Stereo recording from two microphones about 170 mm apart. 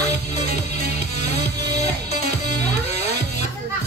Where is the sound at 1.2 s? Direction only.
40° left (ahead or behind).